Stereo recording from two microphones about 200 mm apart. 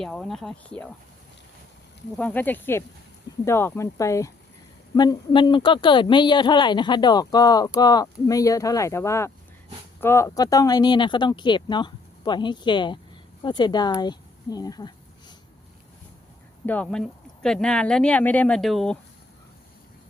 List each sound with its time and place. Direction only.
0.0 s speech: 5° left (ahead or behind)
2.1 s speech: 10° left (ahead or behind)
16.6 s speech: 5° left (ahead or behind)